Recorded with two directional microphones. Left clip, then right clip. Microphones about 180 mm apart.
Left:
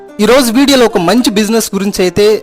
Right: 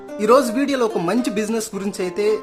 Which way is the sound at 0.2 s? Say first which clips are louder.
Left 7 dB; 45° left (ahead or behind).